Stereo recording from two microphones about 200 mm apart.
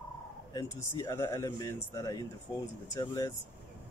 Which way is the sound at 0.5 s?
15° left (ahead or behind).